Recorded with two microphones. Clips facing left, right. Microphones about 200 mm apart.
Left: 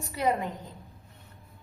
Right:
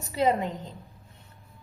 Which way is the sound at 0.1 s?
25° right (ahead or behind).